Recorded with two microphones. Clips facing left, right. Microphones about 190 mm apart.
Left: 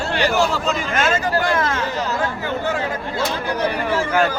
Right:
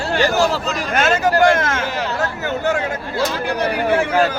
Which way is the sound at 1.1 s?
75° right (ahead or behind).